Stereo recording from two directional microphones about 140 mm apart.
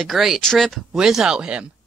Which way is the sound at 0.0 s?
Centre (ahead or behind).